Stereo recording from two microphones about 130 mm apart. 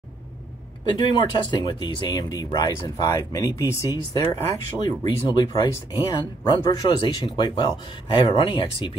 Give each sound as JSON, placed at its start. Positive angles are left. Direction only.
{"t": 0.8, "sound": "speech", "side_deg": 35}